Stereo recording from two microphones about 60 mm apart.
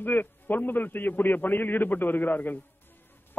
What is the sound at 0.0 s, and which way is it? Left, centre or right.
A woman's voice, left.